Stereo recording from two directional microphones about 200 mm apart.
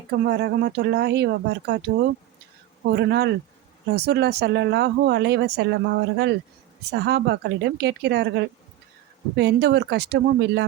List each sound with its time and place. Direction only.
0.1 s speech: 55° right (ahead or behind)